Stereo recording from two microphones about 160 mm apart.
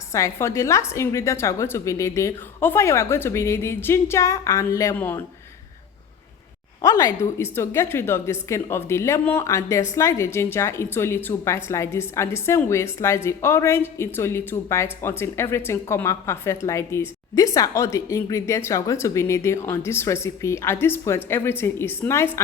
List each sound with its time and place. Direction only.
0.1 s a woman's voice: 20° left (ahead or behind)
6.8 s a woman's voice: 20° left (ahead or behind)